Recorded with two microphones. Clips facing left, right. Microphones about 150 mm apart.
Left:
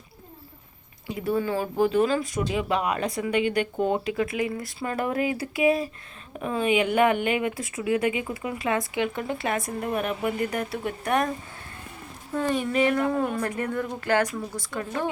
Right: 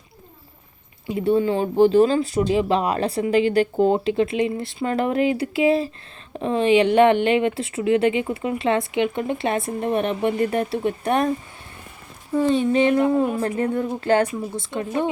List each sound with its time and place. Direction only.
1.2 s speech: 25° right (ahead or behind)
12.5 s a woman's voice: 25° right (ahead or behind)